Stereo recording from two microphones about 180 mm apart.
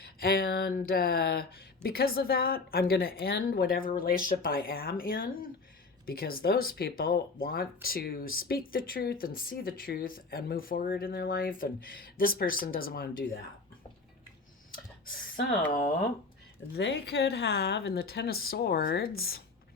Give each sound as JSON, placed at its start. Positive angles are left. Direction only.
{"t": 0.0, "sound": "speech", "side_deg": 55}
{"t": 16.7, "sound": "speech", "side_deg": 75}